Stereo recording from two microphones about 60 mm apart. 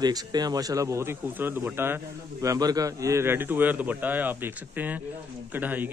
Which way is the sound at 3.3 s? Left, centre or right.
Right.